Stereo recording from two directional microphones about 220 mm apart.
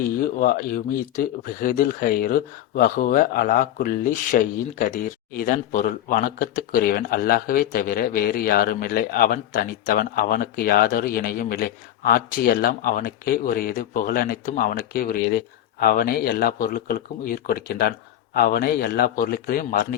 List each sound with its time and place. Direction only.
0.2 s a man's voice: 40° left (ahead or behind)